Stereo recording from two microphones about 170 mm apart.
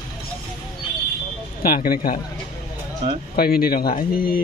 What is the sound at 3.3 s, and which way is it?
Speech, 65° left (ahead or behind).